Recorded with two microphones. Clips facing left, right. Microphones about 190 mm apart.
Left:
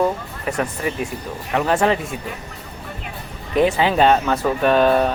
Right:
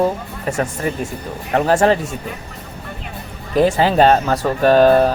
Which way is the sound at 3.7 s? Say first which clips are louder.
Right 3 dB; 40° right (ahead or behind).